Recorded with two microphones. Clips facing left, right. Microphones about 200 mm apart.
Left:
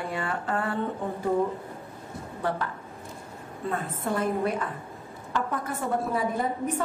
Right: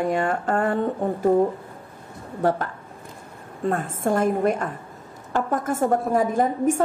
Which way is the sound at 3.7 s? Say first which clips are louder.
Right 6 dB; 45° right (ahead or behind).